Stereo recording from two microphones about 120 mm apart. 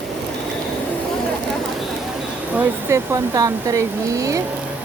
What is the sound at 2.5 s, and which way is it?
Speech, 20° right (ahead or behind).